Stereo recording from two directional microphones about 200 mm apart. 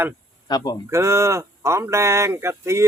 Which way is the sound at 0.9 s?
15° right (ahead or behind).